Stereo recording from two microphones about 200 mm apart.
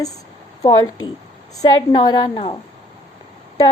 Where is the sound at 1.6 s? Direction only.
20° left (ahead or behind).